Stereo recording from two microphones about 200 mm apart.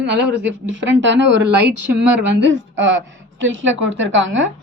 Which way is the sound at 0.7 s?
65° right (ahead or behind).